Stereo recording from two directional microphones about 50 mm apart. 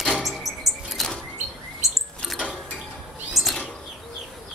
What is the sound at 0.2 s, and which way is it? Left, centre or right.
Bird flight, centre.